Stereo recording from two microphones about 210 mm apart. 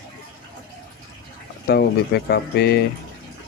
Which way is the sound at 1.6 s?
50° left (ahead or behind).